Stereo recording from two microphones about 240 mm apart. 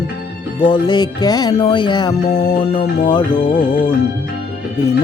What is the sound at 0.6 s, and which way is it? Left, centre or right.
Speech, centre.